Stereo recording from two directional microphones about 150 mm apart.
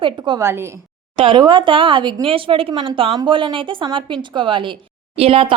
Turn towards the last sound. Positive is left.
turn(degrees=-40)  # may be behind; listen again after turning